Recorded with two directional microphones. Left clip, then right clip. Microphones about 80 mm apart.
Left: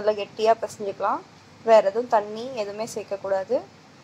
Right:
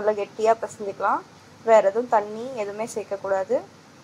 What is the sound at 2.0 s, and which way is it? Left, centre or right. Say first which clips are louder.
A woman's voice: even; right.